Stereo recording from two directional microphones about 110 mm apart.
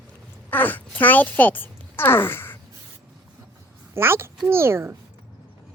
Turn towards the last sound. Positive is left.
turn(degrees=-25)  # may be behind; listen again after turning